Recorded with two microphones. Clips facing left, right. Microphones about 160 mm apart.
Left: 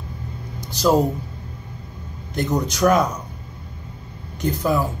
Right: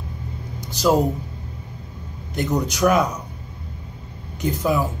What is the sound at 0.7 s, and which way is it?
Speech, 15° right (ahead or behind).